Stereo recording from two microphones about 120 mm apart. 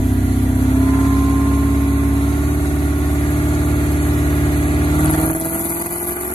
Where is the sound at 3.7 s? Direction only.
40° left (ahead or behind).